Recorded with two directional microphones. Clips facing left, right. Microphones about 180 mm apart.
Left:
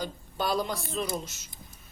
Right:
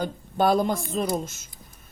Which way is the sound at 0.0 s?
50° right (ahead or behind).